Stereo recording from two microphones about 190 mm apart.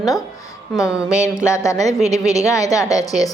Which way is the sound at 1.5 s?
15° left (ahead or behind).